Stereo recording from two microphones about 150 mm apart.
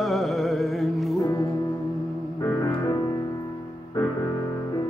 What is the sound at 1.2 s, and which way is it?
Music, 20° left (ahead or behind).